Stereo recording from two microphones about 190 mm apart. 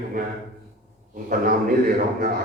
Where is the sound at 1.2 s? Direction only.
45° right (ahead or behind).